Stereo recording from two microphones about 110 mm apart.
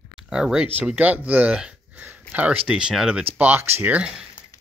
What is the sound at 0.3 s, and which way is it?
Speech, 5° right (ahead or behind).